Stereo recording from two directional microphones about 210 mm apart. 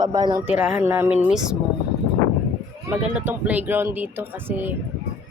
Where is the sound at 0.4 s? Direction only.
5° right (ahead or behind).